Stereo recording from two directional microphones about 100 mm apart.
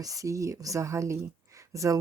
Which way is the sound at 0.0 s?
35° right (ahead or behind).